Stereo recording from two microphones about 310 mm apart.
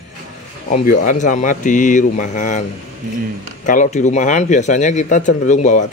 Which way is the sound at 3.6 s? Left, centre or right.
Left.